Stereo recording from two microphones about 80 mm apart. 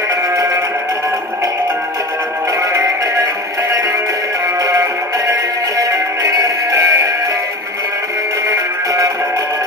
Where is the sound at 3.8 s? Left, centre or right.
Right.